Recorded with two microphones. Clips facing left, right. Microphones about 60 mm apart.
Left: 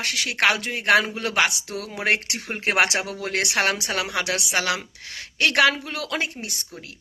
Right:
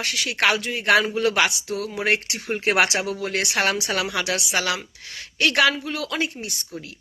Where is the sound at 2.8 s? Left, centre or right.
Left.